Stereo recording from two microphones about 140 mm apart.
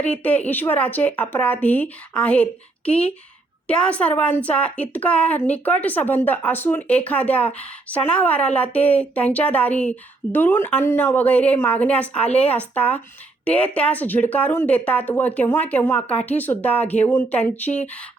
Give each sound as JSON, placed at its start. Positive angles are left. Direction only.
{"t": 0.0, "sound": "a woman's voice", "side_deg": 10}